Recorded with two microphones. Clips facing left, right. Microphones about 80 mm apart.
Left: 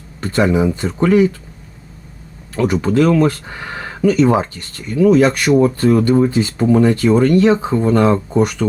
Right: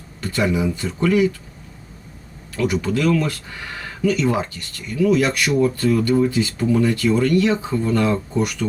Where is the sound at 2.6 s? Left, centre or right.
Left.